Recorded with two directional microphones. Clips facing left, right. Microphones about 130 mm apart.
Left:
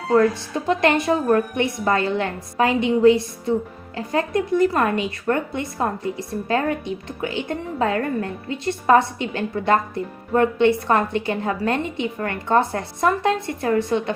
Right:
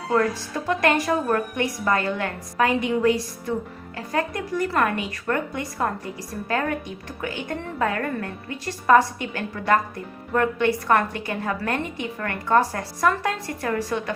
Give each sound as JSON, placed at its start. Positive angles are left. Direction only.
{"t": 0.1, "sound": "speech", "side_deg": 25}